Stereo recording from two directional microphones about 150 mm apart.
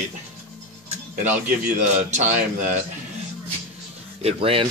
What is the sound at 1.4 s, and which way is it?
A man's voice, 60° right (ahead or behind).